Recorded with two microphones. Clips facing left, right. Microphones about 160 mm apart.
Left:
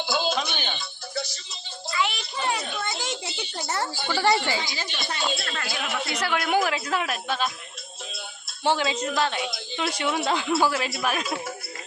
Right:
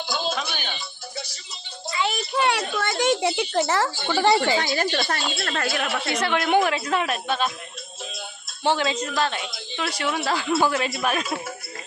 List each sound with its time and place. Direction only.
0.0 s music: centre (ahead or behind)
2.3 s a sound: 70° right (ahead or behind); by 3.9 s 90° right
4.1 s a woman's voice: 15° right (ahead or behind)
4.6 s a woman's voice: 65° right (ahead or behind)
5.4 s a woman's voice: 50° right (ahead or behind)
6.1 s a woman's voice: 5° left (ahead or behind)
8.6 s a woman's voice: 10° left (ahead or behind)
10.5 s a woman's voice: 5° left (ahead or behind)